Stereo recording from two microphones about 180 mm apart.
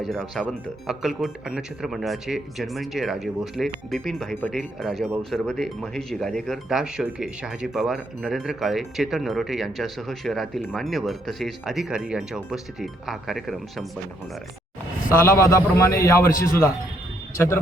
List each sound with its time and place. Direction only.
0.0 s speech: centre (ahead or behind)
15.1 s a man's voice: 15° left (ahead or behind)